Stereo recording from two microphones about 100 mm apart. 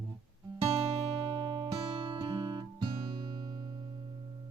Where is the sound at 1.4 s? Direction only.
55° right (ahead or behind).